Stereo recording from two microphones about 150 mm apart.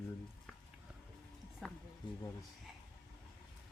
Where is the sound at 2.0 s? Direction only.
30° left (ahead or behind).